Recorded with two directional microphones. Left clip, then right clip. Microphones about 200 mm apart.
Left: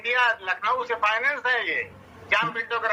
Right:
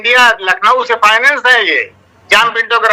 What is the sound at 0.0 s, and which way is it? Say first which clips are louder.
A man's voice: right 14 dB; 45° right (ahead or behind).